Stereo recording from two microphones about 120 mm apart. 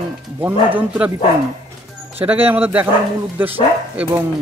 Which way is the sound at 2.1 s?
15° right (ahead or behind).